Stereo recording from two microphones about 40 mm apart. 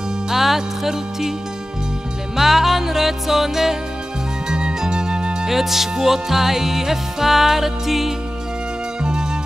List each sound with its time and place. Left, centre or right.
0.3 s music: centre
2.3 s music: centre
4.5 s music: right
5.5 s music: centre